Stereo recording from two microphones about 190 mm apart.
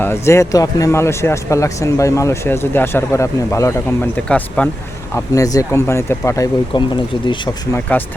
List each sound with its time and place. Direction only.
0.0 s speech: 15° left (ahead or behind)
5.1 s speech: 15° left (ahead or behind)